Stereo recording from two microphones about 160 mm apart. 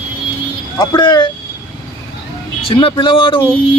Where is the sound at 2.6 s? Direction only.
35° left (ahead or behind).